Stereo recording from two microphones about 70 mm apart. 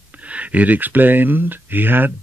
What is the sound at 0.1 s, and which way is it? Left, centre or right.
Speech, centre.